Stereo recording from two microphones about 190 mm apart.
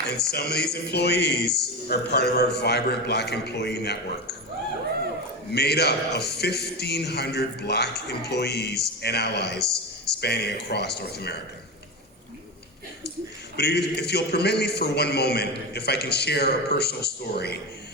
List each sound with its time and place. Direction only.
0.1 s speech: 55° left (ahead or behind)
5.5 s speech: 60° left (ahead or behind)
13.6 s speech: 60° left (ahead or behind)